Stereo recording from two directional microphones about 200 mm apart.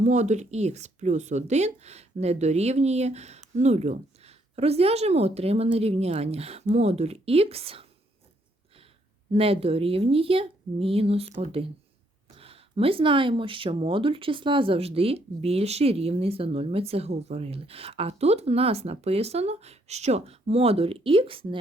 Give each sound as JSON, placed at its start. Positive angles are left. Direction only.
{"t": 0.0, "sound": "a woman's voice", "side_deg": -35}
{"t": 9.3, "sound": "speech", "side_deg": -30}